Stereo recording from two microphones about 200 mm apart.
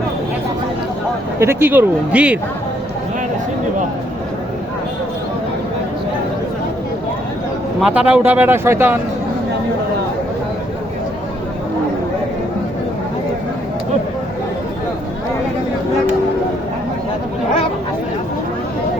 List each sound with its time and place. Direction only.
1.4 s speech: 10° right (ahead or behind)
7.8 s speech: 5° right (ahead or behind)